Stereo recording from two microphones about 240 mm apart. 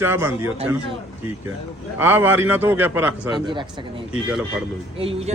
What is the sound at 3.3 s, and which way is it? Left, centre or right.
Speech, centre.